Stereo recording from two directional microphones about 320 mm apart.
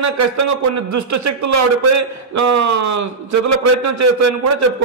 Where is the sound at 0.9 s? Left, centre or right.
Right.